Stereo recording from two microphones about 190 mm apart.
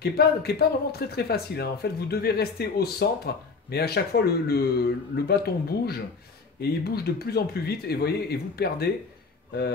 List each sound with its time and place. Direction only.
0.0 s speech: 55° left (ahead or behind)